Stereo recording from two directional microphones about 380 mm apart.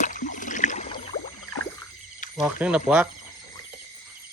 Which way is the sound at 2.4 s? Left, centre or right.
Centre.